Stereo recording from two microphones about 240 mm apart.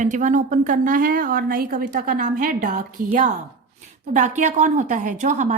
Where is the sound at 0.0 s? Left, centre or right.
Right.